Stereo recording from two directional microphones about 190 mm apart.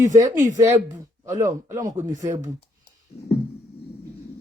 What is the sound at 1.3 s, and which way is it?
Speech, 15° right (ahead or behind).